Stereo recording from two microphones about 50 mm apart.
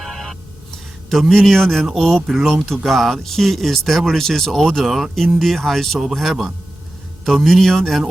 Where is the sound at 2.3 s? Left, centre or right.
Centre.